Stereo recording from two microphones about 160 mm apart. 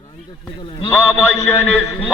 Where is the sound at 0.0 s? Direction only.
25° left (ahead or behind).